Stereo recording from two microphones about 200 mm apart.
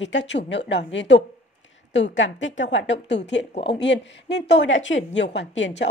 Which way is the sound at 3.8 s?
60° left (ahead or behind).